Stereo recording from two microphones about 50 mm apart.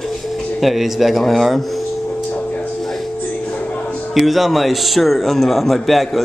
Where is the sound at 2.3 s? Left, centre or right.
Left.